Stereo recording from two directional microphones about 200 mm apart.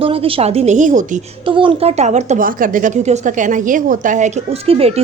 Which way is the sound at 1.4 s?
25° right (ahead or behind).